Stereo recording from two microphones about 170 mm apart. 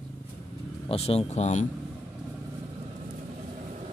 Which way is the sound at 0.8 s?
35° left (ahead or behind).